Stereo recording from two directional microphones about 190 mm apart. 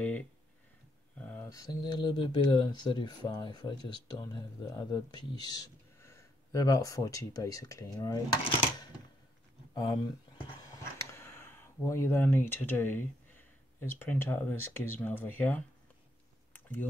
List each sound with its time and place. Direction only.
1.1 s speech: 10° left (ahead or behind)
9.8 s speech: 20° left (ahead or behind)
16.5 s a sound: 10° left (ahead or behind)